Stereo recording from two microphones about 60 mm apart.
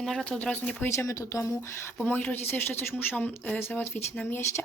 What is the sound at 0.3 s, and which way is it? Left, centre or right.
Speech, centre.